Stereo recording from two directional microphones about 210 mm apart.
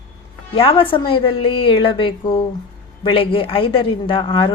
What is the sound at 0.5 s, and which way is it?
A man's voice, 25° left (ahead or behind).